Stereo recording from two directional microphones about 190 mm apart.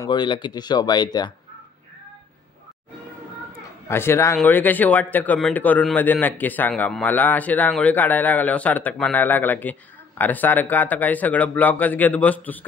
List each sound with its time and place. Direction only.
0.0 s speech: 25° left (ahead or behind)
3.9 s a man's voice: 10° left (ahead or behind)